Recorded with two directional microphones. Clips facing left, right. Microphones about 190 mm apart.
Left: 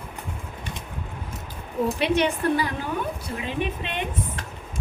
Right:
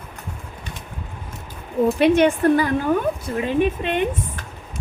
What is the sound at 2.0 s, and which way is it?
A woman's voice, 50° right (ahead or behind).